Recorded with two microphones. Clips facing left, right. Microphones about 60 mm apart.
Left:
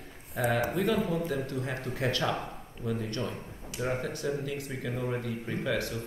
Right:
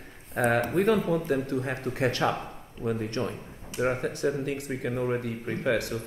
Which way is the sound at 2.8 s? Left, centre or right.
Right.